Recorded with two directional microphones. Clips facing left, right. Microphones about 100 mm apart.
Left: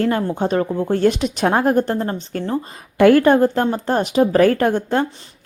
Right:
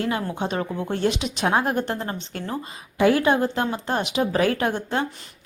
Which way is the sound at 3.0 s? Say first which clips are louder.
Left 7 dB; 50° left (ahead or behind).